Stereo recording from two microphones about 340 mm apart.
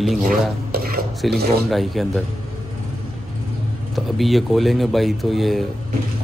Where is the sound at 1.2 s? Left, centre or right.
Centre.